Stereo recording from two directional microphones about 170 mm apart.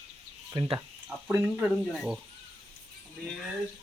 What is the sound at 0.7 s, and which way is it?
Speech, 5° right (ahead or behind).